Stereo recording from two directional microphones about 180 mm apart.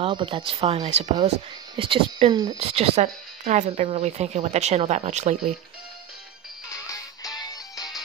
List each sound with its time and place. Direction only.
0.0 s speech: 30° right (ahead or behind)
6.7 s music: 20° left (ahead or behind)